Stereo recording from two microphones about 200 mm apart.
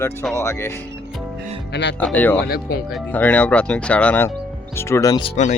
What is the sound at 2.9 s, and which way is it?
Speech, 5° left (ahead or behind).